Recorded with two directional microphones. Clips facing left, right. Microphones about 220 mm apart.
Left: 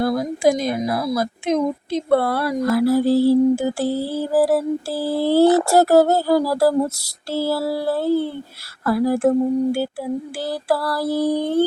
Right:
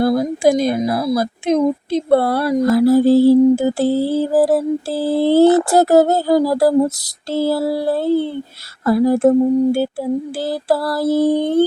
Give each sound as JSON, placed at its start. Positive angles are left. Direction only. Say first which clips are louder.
{"t": 0.0, "sound": "speech", "louder": "right 4 dB", "side_deg": -30}
{"t": 5.6, "sound": "a sound", "louder": "right 2 dB", "side_deg": -20}
{"t": 8.8, "sound": "speech", "louder": "right 4 dB", "side_deg": -20}
{"t": 10.3, "sound": "speech", "louder": "right 3 dB", "side_deg": -20}